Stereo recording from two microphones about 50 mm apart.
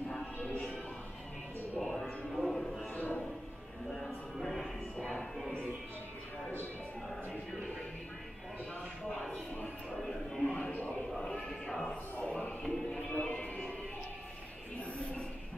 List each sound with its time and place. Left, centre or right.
0.4 s music: left
1.8 s music: centre
2.9 s music: left
3.9 s music: centre
4.9 s music: centre
9.8 s a sound: centre
10.7 s a sound: left
11.1 s a sound: centre
11.9 s music: left